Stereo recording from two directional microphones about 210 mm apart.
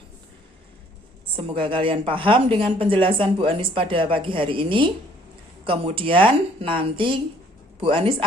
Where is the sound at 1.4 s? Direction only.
25° right (ahead or behind).